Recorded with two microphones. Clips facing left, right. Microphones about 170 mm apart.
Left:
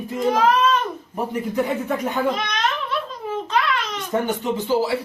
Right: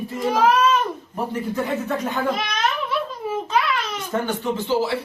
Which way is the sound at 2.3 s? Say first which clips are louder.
Even; 5° right (ahead or behind).